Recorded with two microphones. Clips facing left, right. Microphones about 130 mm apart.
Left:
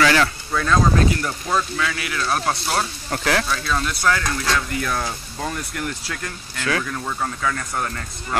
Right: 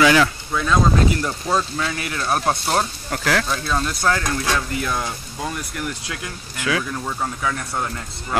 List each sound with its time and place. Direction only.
0.0 s speech: 10° right (ahead or behind)
1.1 s speech: 20° right (ahead or behind)
1.8 s speech: 35° right (ahead or behind)
2.2 s speech: 20° right (ahead or behind)
3.1 s speech: centre (ahead or behind)
3.4 s speech: 25° right (ahead or behind)
5.0 s speech: centre (ahead or behind)
6.0 s speech: 15° right (ahead or behind)